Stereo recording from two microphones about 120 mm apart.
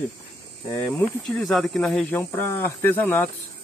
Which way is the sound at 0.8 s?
Centre (ahead or behind).